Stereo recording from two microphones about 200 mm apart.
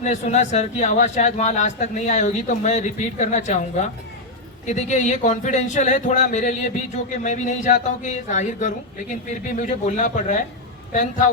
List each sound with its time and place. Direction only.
0.0 s speech: 35° left (ahead or behind)